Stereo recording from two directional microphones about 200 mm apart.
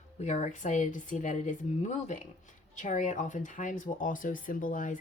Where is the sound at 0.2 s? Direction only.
35° left (ahead or behind).